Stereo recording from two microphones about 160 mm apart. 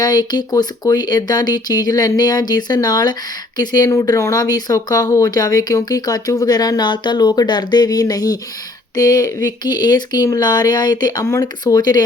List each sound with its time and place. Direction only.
0.0 s speech: 25° left (ahead or behind)